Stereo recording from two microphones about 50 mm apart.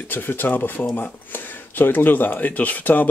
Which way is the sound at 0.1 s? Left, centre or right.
Left.